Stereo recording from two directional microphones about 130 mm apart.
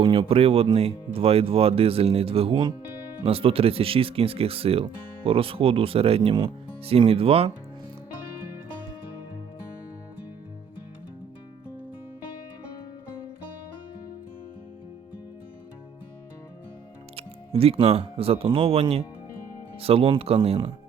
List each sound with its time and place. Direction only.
0.0 s speech: 40° right (ahead or behind)
17.2 s music: 50° right (ahead or behind)
18.0 s speech: 50° right (ahead or behind)